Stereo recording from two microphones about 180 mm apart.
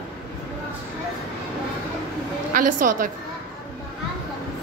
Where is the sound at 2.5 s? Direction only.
45° right (ahead or behind).